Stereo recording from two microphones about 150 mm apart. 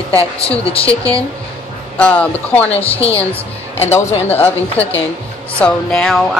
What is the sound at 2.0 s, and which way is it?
Speech, 10° left (ahead or behind).